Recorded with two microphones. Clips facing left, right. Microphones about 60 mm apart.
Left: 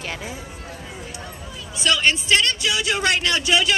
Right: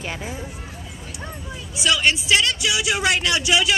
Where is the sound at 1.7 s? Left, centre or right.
Centre.